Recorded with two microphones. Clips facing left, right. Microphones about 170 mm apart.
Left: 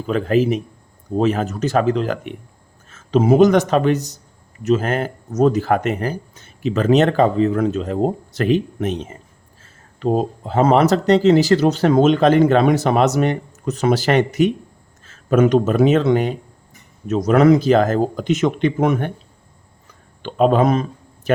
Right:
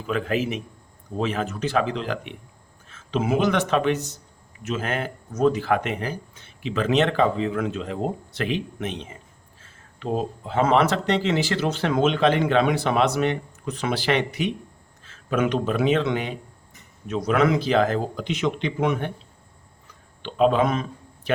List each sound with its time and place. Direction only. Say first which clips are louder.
0.0 s a man's voice: left 7 dB; 35° left (ahead or behind)
20.2 s speech: left 4 dB; 45° left (ahead or behind)